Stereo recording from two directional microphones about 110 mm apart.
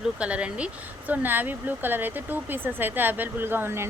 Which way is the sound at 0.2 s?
10° right (ahead or behind).